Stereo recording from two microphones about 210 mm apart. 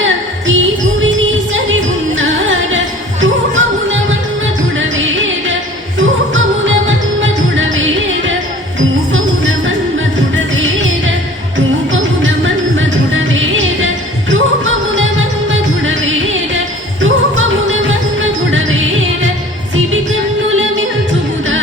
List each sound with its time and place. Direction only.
0.0 s music: 65° right (ahead or behind)
2.1 s music: 65° right (ahead or behind)
9.1 s music: 65° right (ahead or behind)
20.5 s music: 70° right (ahead or behind)